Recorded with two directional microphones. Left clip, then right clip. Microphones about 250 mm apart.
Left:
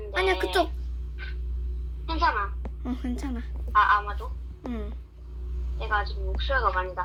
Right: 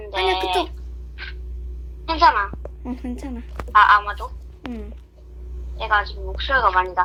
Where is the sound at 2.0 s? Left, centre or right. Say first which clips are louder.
Right 9 dB; right.